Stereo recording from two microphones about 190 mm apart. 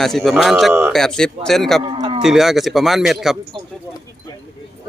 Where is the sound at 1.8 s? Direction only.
25° right (ahead or behind).